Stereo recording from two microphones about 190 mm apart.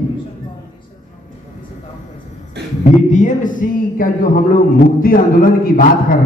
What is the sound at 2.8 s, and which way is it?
Speech, 40° left (ahead or behind).